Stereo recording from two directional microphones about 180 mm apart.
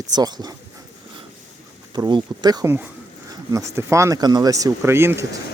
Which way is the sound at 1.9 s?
25° right (ahead or behind).